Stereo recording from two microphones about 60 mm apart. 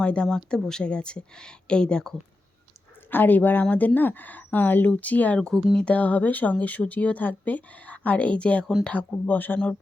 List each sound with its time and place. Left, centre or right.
0.0 s speech: centre
3.1 s speech: left